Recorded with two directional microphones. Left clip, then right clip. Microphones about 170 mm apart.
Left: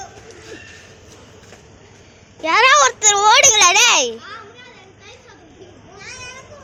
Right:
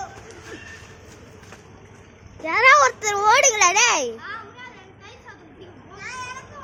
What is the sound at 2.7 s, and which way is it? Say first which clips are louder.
A child's voice: right 1 dB; centre (ahead or behind).